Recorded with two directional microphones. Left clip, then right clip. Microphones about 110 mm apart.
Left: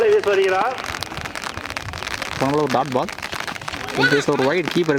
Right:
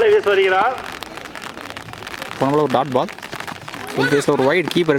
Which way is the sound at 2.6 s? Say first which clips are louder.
Right 2 dB; 15° right (ahead or behind).